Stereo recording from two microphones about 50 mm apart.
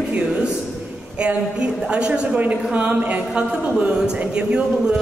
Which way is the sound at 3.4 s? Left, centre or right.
Centre.